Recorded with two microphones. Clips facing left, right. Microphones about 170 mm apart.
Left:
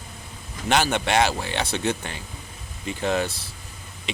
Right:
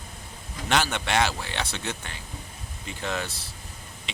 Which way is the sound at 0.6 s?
15° left (ahead or behind).